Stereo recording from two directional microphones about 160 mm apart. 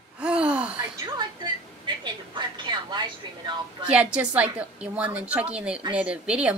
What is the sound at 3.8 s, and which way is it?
A woman's voice, 5° right (ahead or behind).